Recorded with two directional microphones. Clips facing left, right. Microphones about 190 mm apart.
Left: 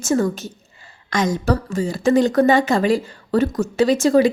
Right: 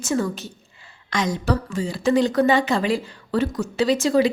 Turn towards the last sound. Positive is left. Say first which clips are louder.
# left 4 dB
turn(degrees=45)  # may be behind; listen again after turning